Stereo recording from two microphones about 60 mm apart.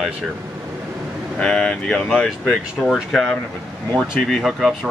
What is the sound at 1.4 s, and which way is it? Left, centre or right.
Speech, centre.